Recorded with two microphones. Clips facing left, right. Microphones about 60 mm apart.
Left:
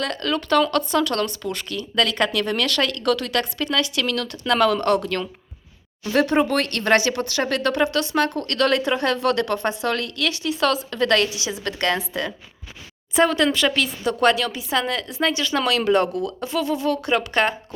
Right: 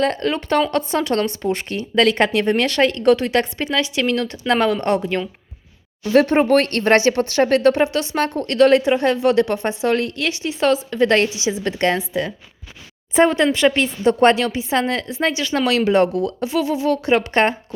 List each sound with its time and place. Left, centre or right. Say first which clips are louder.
0.0 s speech: right 5 dB; right
6.0 s speech: right 4 dB; right
13.1 s speech: right 3 dB; right